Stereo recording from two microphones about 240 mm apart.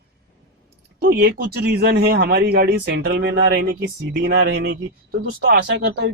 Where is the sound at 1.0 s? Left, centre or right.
Right.